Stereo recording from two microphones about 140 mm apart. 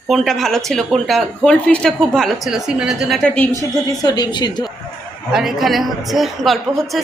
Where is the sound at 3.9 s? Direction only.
25° left (ahead or behind).